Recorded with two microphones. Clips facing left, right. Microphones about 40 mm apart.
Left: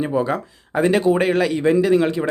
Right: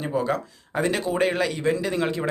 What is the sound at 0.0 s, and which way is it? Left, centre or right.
A man's voice, centre.